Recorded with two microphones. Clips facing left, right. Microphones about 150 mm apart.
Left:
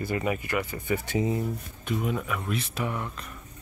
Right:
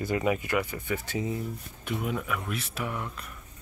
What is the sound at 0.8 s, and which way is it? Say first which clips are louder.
Speech: left 4 dB; 15° left (ahead or behind).